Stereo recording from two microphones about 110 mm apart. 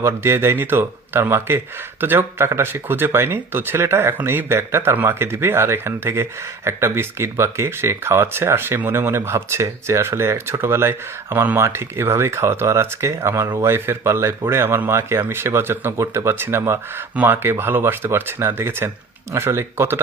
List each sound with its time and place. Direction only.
0.0 s speech: 25° right (ahead or behind)